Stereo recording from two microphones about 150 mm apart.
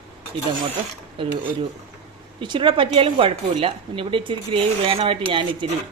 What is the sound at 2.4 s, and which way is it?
Speech, 30° right (ahead or behind).